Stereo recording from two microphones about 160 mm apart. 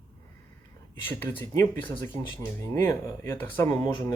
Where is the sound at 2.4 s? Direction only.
15° left (ahead or behind).